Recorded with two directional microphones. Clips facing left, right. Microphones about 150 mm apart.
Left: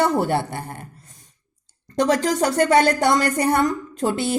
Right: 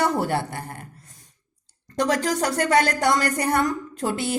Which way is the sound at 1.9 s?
25° left (ahead or behind).